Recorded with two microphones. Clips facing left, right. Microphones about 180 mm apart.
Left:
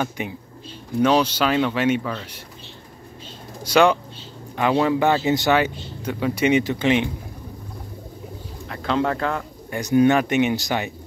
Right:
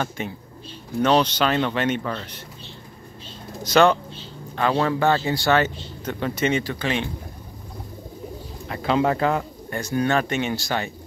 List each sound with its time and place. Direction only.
0.2 s speech: 15° left (ahead or behind)
3.6 s speech: 10° left (ahead or behind)
8.6 s speech: 5° right (ahead or behind)
9.7 s speech: 15° left (ahead or behind)